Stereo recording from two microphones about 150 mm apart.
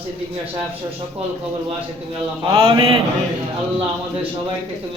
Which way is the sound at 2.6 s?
35° right (ahead or behind).